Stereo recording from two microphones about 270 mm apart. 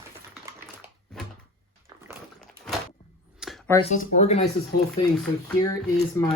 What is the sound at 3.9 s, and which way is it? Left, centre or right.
Speech, left.